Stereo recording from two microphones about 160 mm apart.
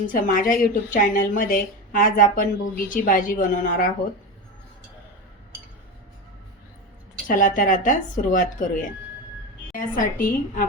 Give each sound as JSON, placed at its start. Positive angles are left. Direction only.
{"t": 0.1, "sound": "a woman's voice", "side_deg": 55}
{"t": 7.3, "sound": "a woman's voice", "side_deg": 55}
{"t": 9.7, "sound": "a woman's voice", "side_deg": 60}